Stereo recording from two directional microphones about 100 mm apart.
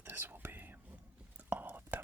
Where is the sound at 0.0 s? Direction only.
20° right (ahead or behind).